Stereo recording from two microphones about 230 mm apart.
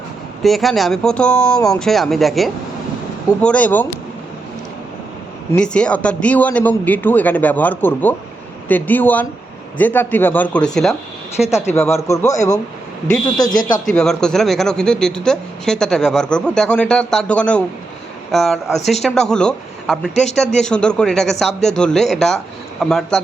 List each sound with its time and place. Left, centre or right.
0.4 s a man's voice: centre
5.5 s a man's voice: centre
11.6 s a man's voice: centre
13.9 s speech: centre